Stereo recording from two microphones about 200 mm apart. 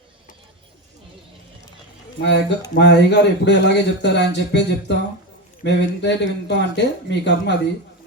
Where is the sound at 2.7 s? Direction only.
60° left (ahead or behind).